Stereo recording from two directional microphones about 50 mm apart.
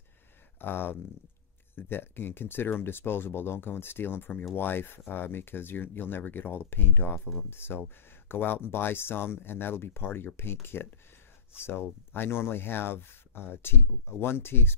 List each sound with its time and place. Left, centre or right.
0.6 s speech: left